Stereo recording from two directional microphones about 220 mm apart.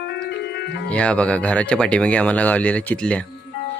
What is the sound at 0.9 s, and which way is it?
Speech, 5° left (ahead or behind).